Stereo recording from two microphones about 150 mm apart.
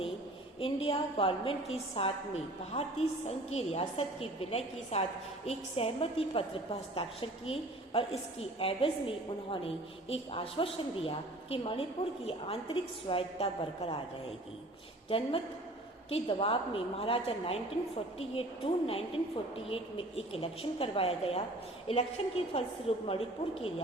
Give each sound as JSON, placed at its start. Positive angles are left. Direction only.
{"t": 0.6, "sound": "a woman's voice", "side_deg": 40}
{"t": 16.0, "sound": "a woman's voice", "side_deg": 40}